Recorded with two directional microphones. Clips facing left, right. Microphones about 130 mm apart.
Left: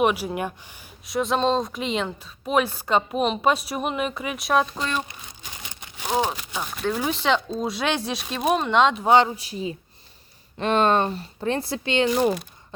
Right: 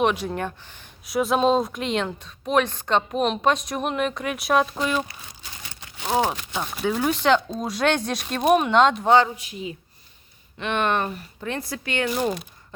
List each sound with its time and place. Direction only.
0.0 s speech: 5° left (ahead or behind)
1.0 s speech: centre (ahead or behind)
5.0 s crumpling: 15° left (ahead or behind)
6.2 s speech: 10° left (ahead or behind)
6.7 s speech: centre (ahead or behind)
9.3 s speech: 35° left (ahead or behind)